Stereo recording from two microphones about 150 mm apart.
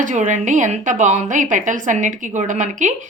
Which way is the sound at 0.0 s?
55° right (ahead or behind).